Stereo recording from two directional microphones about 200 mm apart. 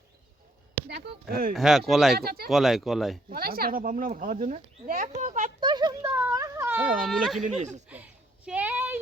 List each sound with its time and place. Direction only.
0.9 s speech: 55° right (ahead or behind)
1.5 s speech: centre (ahead or behind)
2.1 s speech: 50° right (ahead or behind)
2.5 s speech: centre (ahead or behind)
3.2 s speech: 45° right (ahead or behind)
5.5 s a sound: 20° right (ahead or behind)
7.1 s speech: centre (ahead or behind)
8.4 s a sound: 10° right (ahead or behind)